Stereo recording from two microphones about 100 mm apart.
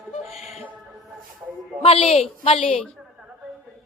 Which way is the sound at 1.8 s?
85° left.